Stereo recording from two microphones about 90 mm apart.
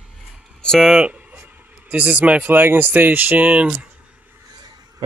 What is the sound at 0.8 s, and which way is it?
Speech, 10° right (ahead or behind).